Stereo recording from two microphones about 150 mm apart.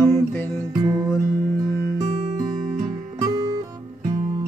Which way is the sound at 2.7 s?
25° right (ahead or behind).